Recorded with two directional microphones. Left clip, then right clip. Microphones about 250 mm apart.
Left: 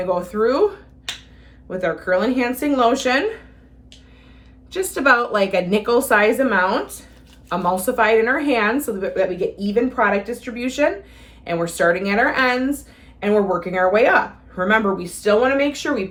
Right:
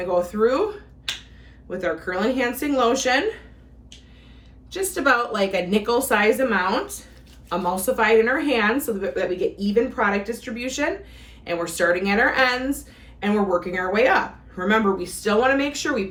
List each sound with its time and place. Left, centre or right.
0.0 s speech: centre
1.8 s speech: centre
4.7 s speech: left